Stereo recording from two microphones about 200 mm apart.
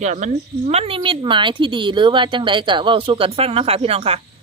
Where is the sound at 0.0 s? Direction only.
35° right (ahead or behind).